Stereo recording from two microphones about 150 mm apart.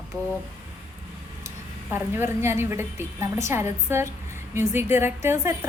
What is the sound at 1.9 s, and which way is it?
A woman's voice, 15° right (ahead or behind).